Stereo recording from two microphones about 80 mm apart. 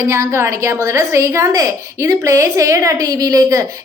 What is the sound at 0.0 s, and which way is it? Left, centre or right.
A woman's voice, right.